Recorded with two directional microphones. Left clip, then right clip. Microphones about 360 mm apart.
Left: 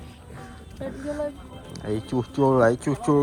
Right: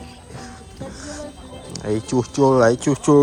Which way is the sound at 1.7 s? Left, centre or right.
Centre.